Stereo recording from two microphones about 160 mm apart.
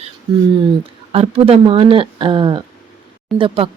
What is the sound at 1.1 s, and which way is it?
Speech, 35° right (ahead or behind).